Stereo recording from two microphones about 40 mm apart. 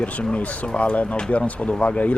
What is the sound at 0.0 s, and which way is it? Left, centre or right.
Speech, left.